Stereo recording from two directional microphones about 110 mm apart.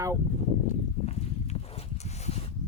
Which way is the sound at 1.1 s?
80° left.